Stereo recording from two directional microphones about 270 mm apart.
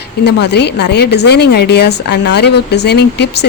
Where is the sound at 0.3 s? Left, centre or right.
Left.